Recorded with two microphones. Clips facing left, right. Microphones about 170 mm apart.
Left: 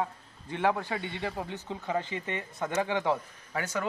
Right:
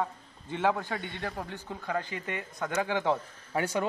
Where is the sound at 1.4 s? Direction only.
20° left (ahead or behind).